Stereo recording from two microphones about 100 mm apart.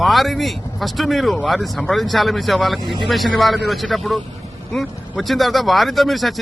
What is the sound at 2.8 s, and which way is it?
Speech, 55° right (ahead or behind).